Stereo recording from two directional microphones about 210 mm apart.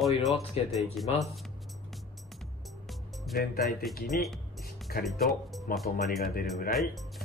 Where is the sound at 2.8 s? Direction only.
Centre (ahead or behind).